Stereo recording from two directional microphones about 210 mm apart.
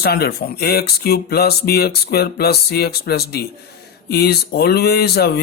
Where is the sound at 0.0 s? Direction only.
50° left (ahead or behind).